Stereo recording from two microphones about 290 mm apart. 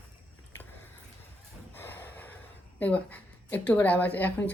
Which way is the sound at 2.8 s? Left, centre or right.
Centre.